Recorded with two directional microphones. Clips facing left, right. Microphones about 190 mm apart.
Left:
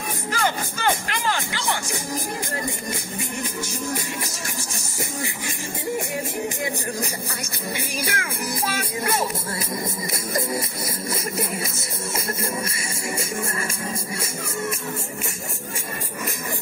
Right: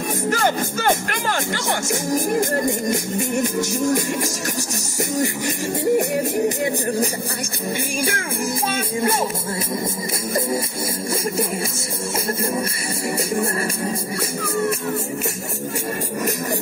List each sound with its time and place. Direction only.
0.3 s speech: 45° right (ahead or behind)
8.2 s speech: 25° right (ahead or behind)